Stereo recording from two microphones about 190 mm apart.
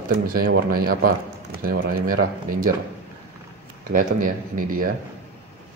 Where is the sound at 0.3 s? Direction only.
50° right (ahead or behind).